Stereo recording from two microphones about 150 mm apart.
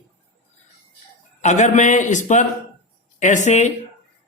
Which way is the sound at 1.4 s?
50° left (ahead or behind).